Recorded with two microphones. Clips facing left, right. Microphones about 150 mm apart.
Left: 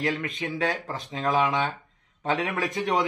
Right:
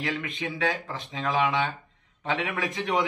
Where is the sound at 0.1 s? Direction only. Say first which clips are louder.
Left 2 dB; 45° left (ahead or behind).